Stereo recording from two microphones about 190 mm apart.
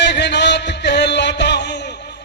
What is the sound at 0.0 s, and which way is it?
Music, 65° left (ahead or behind).